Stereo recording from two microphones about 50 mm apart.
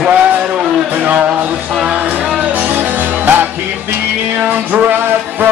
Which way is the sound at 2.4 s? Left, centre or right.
Right.